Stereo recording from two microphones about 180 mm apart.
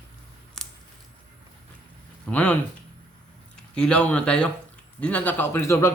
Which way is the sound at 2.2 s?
5° left (ahead or behind).